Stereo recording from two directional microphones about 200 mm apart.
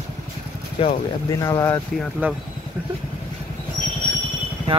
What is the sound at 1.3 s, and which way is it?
Speech, 15° left (ahead or behind).